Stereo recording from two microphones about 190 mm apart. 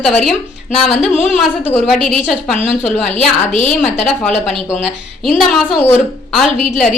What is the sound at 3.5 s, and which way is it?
Speech, 40° left (ahead or behind).